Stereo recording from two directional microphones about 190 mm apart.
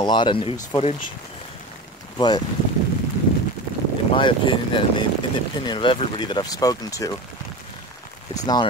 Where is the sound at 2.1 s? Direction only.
20° left (ahead or behind).